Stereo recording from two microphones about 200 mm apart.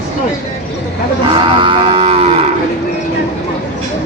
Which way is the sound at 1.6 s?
25° right (ahead or behind).